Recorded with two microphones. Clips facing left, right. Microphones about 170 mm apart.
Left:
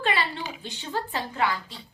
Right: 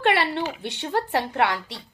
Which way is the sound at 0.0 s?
70° right (ahead or behind).